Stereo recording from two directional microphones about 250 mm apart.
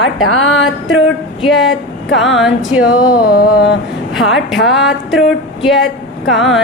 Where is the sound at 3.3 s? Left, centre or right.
Left.